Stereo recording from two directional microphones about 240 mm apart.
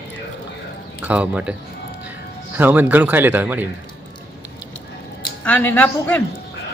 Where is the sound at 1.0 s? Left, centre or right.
Centre.